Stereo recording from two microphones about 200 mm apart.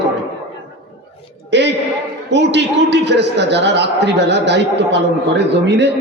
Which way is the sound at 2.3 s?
60° right (ahead or behind).